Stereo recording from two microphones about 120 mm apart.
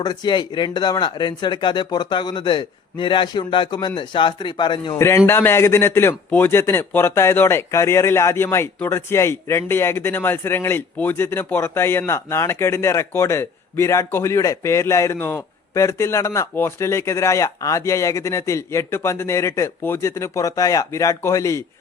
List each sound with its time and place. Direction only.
0.0 s speech: 35° left (ahead or behind)
4.9 s a man's voice: 20° left (ahead or behind)